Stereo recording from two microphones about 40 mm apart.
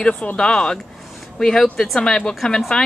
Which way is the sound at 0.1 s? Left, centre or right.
Left.